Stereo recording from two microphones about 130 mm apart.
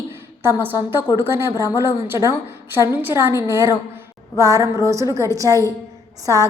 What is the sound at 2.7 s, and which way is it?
A woman's voice, 15° right (ahead or behind).